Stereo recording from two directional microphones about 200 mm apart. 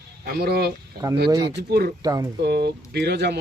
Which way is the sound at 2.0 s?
20° right (ahead or behind).